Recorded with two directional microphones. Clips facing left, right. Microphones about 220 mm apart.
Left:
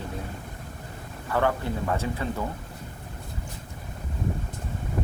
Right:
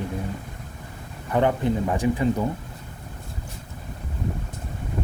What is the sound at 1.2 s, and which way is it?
A man's voice, 20° right (ahead or behind).